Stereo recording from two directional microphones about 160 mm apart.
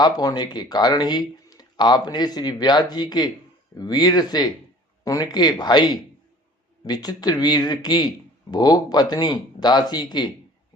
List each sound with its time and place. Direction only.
0.0 s speech: 25° left (ahead or behind)